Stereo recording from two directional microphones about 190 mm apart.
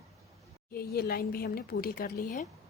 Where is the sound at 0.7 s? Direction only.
50° left (ahead or behind).